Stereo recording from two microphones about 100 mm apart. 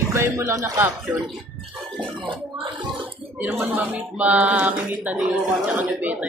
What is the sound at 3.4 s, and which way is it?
Speech, 20° right (ahead or behind).